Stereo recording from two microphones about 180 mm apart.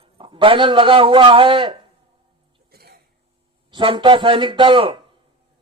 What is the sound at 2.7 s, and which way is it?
Throat clearing, 60° right (ahead or behind).